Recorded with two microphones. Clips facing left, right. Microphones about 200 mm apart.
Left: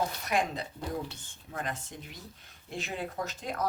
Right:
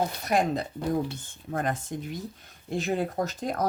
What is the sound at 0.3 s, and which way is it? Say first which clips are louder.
Speech: right 7 dB; 40° right (ahead or behind).